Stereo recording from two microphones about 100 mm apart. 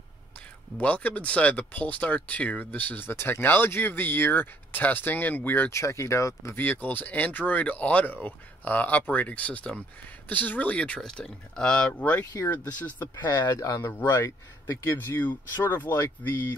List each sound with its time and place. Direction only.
0.7 s speech: 15° left (ahead or behind)
5.8 s speech: 30° left (ahead or behind)
6.6 s speech: 20° left (ahead or behind)
13.0 s speech: 40° left (ahead or behind); by 16.3 s 20° left (ahead or behind)